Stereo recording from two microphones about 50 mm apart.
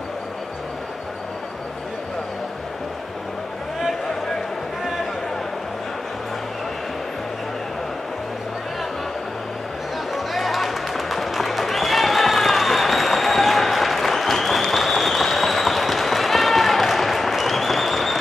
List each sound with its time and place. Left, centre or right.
10.1 s run: centre